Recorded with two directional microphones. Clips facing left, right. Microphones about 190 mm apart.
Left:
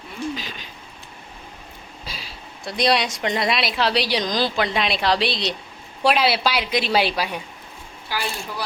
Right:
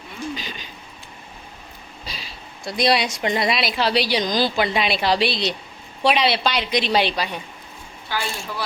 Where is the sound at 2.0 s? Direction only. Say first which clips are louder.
Even; centre (ahead or behind).